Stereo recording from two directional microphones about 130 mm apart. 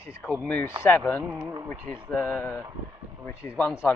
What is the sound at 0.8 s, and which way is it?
Speech, 15° left (ahead or behind).